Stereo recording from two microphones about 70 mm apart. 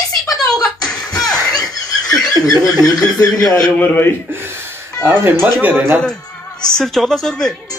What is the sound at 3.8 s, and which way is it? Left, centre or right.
Speech, left.